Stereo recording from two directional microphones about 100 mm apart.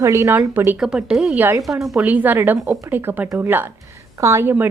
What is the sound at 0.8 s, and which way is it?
Speech, 10° right (ahead or behind).